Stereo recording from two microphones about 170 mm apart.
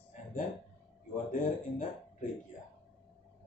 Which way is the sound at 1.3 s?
50° left (ahead or behind).